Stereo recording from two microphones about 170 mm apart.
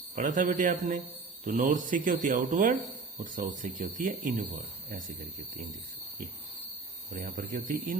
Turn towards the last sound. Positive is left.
turn(degrees=-55)  # may be behind; listen again after turning